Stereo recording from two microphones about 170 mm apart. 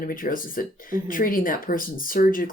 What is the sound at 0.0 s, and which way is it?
Speech, 55° left (ahead or behind).